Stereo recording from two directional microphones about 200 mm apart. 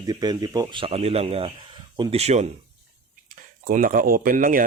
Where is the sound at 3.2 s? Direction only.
45° right (ahead or behind).